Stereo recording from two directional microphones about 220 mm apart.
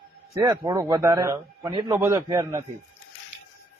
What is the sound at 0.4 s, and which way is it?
A man's voice, 15° right (ahead or behind).